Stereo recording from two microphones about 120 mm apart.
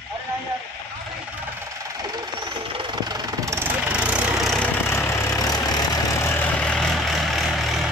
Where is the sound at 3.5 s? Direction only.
15° right (ahead or behind).